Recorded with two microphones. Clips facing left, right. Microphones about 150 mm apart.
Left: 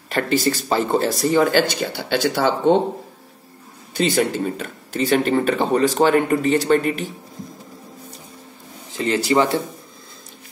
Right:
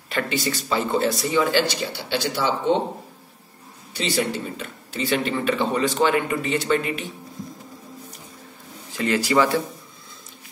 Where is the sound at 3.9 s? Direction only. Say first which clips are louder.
Left 5 dB; 50° left (ahead or behind).